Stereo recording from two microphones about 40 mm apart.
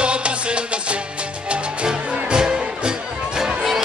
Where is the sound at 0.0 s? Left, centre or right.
Right.